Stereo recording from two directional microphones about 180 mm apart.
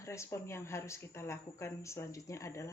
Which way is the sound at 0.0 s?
15° left (ahead or behind).